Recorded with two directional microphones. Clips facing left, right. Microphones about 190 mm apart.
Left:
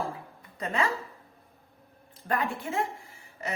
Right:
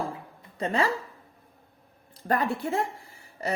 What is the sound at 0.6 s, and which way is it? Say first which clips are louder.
Speech: right 3 dB; 30° right (ahead or behind).